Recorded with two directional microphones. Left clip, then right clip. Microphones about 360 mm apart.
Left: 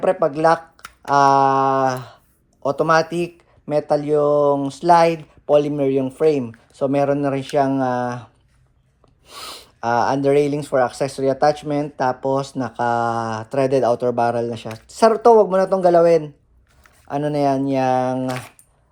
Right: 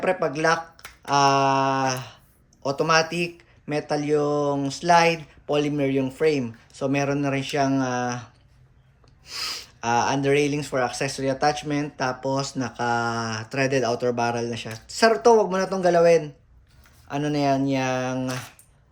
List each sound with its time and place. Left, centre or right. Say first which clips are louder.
0.0 s speech: left 6 dB; centre